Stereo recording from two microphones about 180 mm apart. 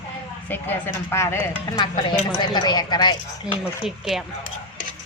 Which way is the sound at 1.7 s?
30° left (ahead or behind).